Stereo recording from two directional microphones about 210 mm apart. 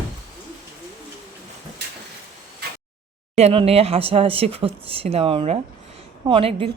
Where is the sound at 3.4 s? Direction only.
30° right (ahead or behind).